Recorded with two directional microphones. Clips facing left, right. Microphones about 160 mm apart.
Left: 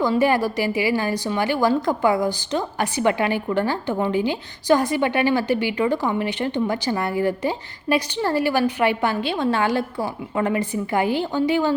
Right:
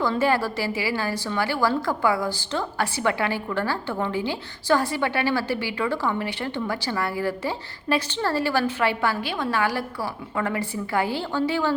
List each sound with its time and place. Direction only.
0.0 s a woman's voice: 15° left (ahead or behind)